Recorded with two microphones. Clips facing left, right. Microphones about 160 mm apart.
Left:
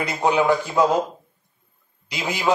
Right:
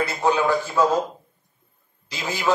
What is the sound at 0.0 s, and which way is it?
Speech, 15° left (ahead or behind).